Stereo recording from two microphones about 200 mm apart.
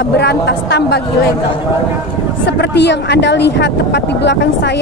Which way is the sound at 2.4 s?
60° left (ahead or behind).